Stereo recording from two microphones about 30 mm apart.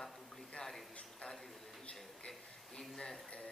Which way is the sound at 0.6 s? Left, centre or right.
Left.